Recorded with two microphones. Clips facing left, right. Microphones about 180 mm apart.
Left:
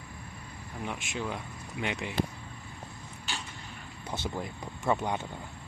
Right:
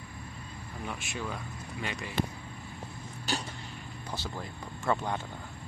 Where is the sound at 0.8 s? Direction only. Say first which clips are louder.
Left 2 dB; 20° left (ahead or behind).